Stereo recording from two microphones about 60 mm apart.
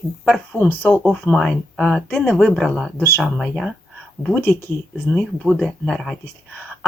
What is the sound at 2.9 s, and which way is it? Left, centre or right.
Speech, left.